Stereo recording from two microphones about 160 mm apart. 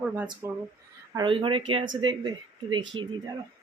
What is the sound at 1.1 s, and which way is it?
Speech, 30° right (ahead or behind).